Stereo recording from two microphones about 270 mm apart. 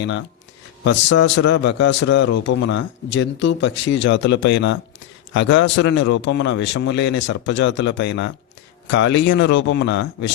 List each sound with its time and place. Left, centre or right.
0.0 s a man's voice: left